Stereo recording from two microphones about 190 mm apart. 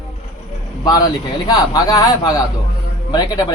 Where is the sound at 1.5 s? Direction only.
20° left (ahead or behind).